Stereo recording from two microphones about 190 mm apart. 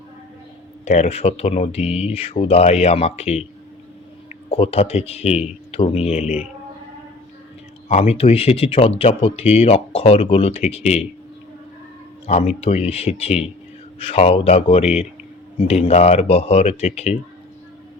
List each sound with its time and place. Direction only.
0.9 s speech: 35° left (ahead or behind)
4.4 s speech: 30° left (ahead or behind)
7.9 s speech: 35° left (ahead or behind)
12.2 s speech: 35° left (ahead or behind)